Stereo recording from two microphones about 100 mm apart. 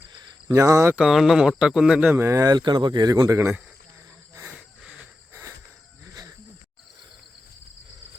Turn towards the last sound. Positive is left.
turn(degrees=-35)  # may be behind; listen again after turning